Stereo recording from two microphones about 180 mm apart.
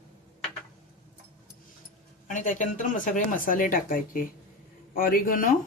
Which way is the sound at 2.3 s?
45° left (ahead or behind).